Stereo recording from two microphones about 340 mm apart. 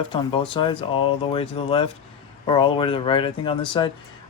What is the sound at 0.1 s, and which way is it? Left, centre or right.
Speech, centre.